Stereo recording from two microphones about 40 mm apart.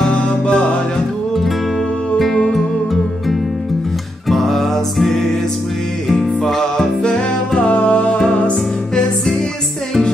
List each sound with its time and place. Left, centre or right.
0.1 s music: left
2.1 s music: centre
7.5 s music: left